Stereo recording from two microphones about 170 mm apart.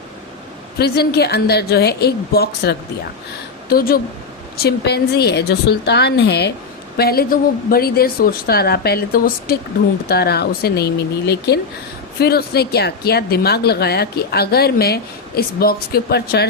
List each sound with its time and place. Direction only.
0.8 s a woman's voice: 70° left (ahead or behind)
6.9 s a woman's voice: 65° left (ahead or behind)